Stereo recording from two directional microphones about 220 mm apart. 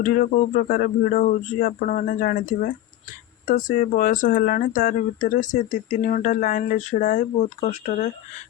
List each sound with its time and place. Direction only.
0.0 s speech: 40° left (ahead or behind)